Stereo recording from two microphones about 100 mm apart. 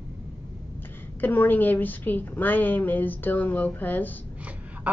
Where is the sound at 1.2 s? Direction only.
20° left (ahead or behind).